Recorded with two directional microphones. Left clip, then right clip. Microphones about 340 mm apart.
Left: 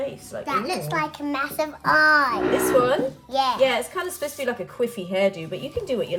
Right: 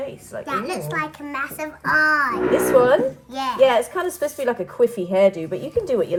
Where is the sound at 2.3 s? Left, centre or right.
Centre.